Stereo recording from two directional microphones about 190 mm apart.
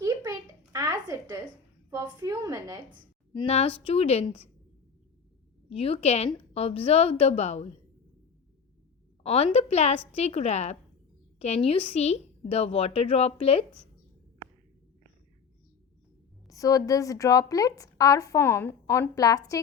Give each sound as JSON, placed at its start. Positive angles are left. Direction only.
{"t": 0.0, "sound": "a sound", "side_deg": -15}
{"t": 1.9, "sound": "a woman's voice", "side_deg": -15}
{"t": 3.3, "sound": "a woman's voice", "side_deg": 35}
{"t": 5.6, "sound": "a woman's voice", "side_deg": 30}
{"t": 9.2, "sound": "a woman's voice", "side_deg": 30}
{"t": 16.5, "sound": "a woman's voice", "side_deg": 20}